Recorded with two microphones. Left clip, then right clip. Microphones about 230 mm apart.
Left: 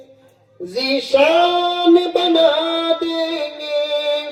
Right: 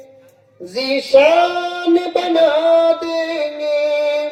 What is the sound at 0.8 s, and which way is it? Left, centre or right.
Music, left.